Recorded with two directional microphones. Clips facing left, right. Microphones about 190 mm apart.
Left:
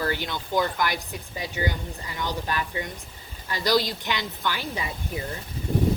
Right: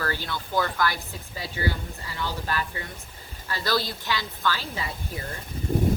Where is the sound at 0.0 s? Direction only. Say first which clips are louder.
Left 2 dB; 15° left (ahead or behind).